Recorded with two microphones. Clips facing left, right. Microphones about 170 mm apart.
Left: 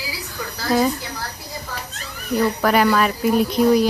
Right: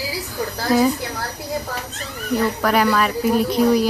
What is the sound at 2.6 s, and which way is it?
Speech, centre (ahead or behind).